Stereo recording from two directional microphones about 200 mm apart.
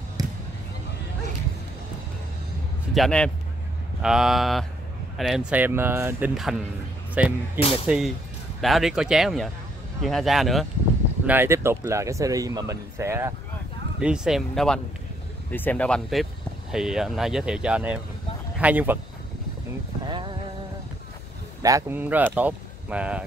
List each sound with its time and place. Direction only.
0.2 s basketball bounce: 20° right (ahead or behind)
2.9 s speech: 5° left (ahead or behind)
11.2 s speech: 10° right (ahead or behind)
20.1 s a sound: 25° right (ahead or behind)
21.6 s speech: 15° right (ahead or behind)